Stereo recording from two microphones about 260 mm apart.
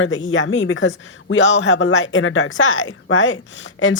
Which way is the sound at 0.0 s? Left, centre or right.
Left.